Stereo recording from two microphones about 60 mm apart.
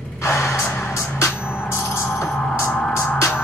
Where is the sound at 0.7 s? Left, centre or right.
Left.